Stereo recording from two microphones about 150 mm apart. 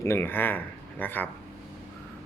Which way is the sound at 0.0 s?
15° left (ahead or behind).